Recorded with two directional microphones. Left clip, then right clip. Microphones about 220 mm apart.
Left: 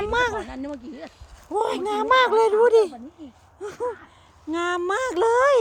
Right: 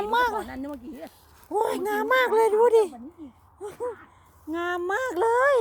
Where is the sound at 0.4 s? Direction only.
25° right (ahead or behind).